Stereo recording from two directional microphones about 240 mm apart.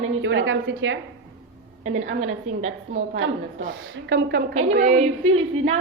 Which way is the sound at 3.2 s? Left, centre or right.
Right.